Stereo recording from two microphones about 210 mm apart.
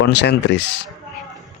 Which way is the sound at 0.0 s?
55° left (ahead or behind).